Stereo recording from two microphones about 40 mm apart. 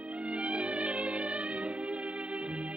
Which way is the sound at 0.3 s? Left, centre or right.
Right.